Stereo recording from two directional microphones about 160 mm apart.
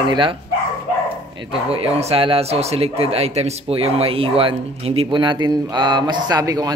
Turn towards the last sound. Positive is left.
turn(degrees=-25)  # may be behind; listen again after turning